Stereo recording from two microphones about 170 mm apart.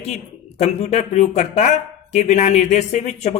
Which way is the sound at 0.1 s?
40° left (ahead or behind).